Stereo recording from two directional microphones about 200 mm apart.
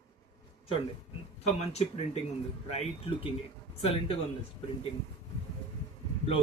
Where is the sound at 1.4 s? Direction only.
30° left (ahead or behind).